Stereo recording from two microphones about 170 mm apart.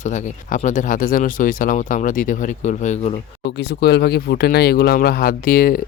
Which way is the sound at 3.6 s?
75° left (ahead or behind).